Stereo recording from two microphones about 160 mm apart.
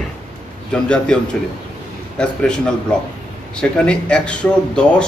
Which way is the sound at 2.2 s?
5° left (ahead or behind).